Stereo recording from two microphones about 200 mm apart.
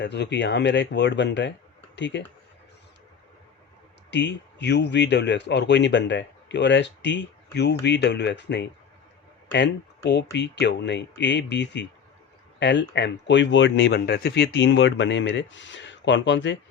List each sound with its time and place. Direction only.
0.0 s a man's voice: 60° left (ahead or behind)
4.1 s a man's voice: 60° left (ahead or behind)